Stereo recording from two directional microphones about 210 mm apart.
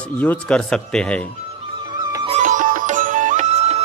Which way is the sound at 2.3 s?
35° right (ahead or behind).